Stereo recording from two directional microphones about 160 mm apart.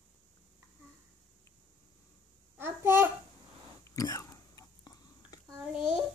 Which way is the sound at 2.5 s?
15° right (ahead or behind).